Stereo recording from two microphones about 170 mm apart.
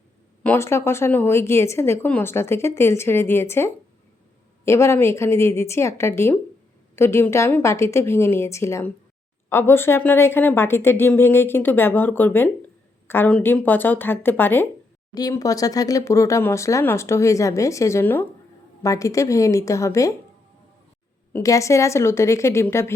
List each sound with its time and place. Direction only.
0.4 s a woman's voice: 15° left (ahead or behind)
21.3 s a woman's voice: 20° left (ahead or behind)